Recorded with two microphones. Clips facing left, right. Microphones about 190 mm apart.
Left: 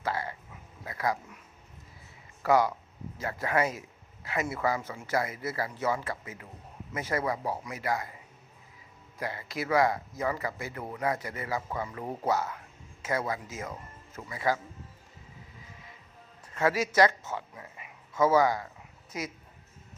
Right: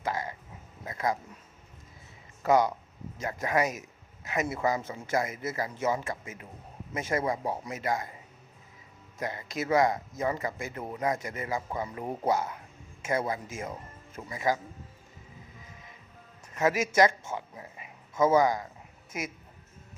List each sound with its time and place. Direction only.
0.0 s a sound: 15° right (ahead or behind)
2.4 s speech: 20° right (ahead or behind)
9.1 s speech: 20° right (ahead or behind)
16.6 s speech: 20° right (ahead or behind)